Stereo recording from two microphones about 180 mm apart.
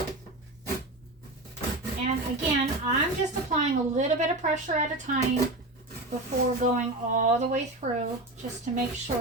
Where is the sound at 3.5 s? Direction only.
40° right (ahead or behind).